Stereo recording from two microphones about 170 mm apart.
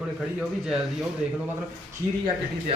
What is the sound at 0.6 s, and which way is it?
Speech, 5° right (ahead or behind).